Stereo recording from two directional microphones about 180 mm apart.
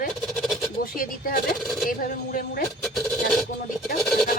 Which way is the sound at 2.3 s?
55° left (ahead or behind).